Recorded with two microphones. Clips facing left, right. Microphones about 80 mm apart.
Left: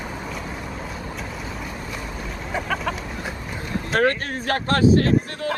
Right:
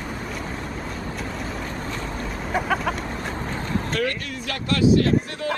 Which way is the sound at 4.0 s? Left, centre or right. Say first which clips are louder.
Left 5 dB; left.